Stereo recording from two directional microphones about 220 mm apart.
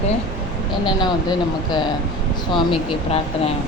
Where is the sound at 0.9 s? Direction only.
20° left (ahead or behind).